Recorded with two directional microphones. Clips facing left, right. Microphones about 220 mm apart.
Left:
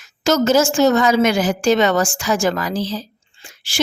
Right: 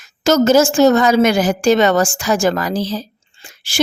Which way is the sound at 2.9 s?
40° right (ahead or behind).